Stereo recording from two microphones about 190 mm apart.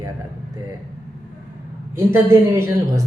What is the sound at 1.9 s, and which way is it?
Speech, 15° right (ahead or behind).